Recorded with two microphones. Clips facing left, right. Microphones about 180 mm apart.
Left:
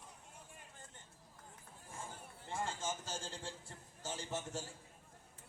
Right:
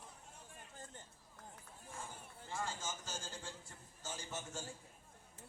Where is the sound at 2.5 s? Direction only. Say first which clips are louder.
Left 3 dB; 25° left (ahead or behind).